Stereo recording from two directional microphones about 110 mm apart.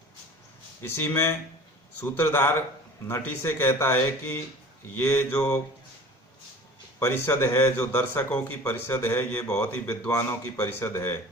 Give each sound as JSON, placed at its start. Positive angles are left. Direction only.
{"t": 0.8, "sound": "speech", "side_deg": 20}
{"t": 7.0, "sound": "speech", "side_deg": 20}